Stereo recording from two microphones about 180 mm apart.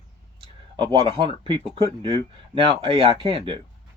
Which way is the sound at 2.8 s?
30° right (ahead or behind).